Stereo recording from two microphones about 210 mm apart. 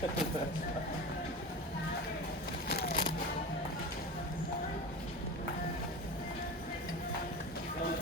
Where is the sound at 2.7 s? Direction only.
45° left (ahead or behind).